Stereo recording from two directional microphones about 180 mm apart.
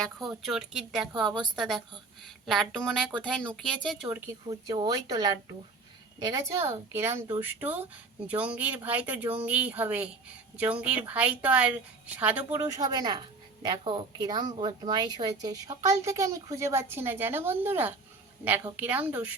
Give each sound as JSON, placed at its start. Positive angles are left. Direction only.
{"t": 0.4, "sound": "speech", "side_deg": 0}
{"t": 4.4, "sound": "a woman's voice", "side_deg": -25}